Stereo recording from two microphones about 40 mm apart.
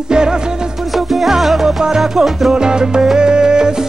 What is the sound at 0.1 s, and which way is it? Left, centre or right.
Music, centre.